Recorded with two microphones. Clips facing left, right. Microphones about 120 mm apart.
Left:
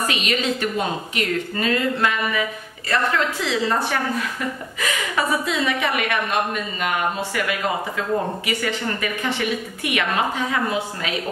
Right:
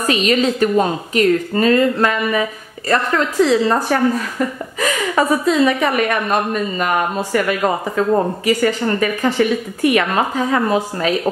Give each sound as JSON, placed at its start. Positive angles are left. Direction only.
{"t": 0.0, "sound": "a woman's voice", "side_deg": -40}